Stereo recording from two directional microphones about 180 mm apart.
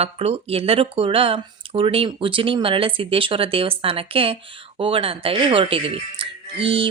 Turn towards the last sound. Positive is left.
turn(degrees=-30)  # may be behind; listen again after turning